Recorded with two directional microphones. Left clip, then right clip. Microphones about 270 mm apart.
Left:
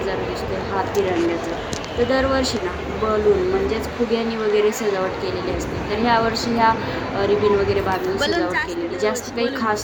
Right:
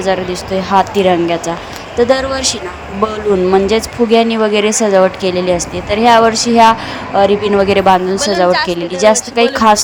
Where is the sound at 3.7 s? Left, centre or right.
Right.